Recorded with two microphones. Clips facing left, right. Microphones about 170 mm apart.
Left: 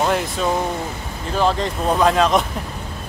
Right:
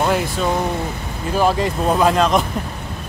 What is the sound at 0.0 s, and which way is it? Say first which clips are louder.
Speech: right 1 dB; centre (ahead or behind).